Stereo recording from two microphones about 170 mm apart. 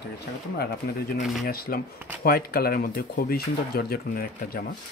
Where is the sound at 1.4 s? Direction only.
60° left (ahead or behind).